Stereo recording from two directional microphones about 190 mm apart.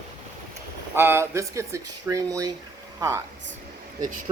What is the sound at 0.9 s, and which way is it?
Speech, 10° right (ahead or behind).